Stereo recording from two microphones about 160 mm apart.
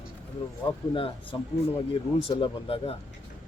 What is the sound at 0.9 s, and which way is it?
Speech, 35° left (ahead or behind).